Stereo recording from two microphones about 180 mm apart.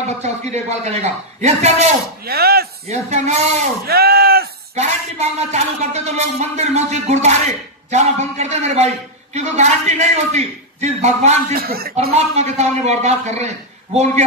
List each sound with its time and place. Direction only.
0.2 s a man's voice: 40° right (ahead or behind)
2.2 s speech: 60° right (ahead or behind)
2.9 s a man's voice: 40° right (ahead or behind)
3.8 s a sound: 60° right (ahead or behind)
4.7 s a man's voice: 40° right (ahead or behind)
11.5 s speech: 55° right (ahead or behind)
12.0 s a man's voice: 35° right (ahead or behind)